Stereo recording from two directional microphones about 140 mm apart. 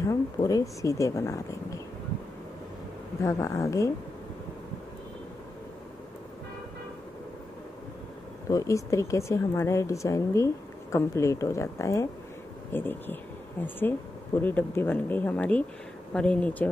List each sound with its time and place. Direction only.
0.0 s speech: 25° left (ahead or behind)
3.2 s speech: 20° left (ahead or behind)
8.5 s speech: 20° left (ahead or behind)